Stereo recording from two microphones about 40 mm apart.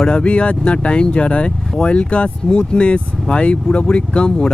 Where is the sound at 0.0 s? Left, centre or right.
Left.